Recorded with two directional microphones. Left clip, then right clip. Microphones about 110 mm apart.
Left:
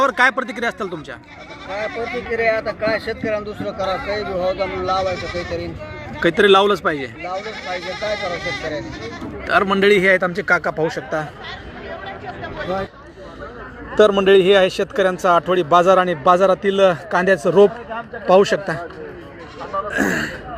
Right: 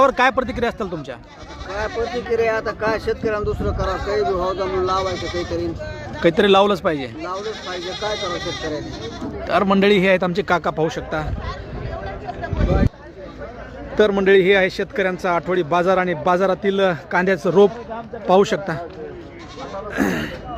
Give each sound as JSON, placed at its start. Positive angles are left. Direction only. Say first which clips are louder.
{"t": 0.0, "sound": "speech", "louder": "even", "side_deg": -30}
{"t": 2.2, "sound": "speech", "louder": "left 2 dB", "side_deg": -35}
{"t": 6.1, "sound": "speech", "louder": "left 1 dB", "side_deg": -25}
{"t": 7.3, "sound": "speech", "louder": "left 3 dB", "side_deg": -15}
{"t": 9.4, "sound": "a man's voice", "louder": "left 1 dB", "side_deg": -30}
{"t": 13.9, "sound": "a man's voice", "louder": "left 2 dB", "side_deg": -5}
{"t": 19.9, "sound": "speech", "louder": "left 1 dB", "side_deg": -10}